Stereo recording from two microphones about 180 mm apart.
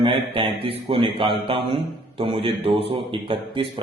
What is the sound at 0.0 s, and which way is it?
A man's voice, 30° right (ahead or behind).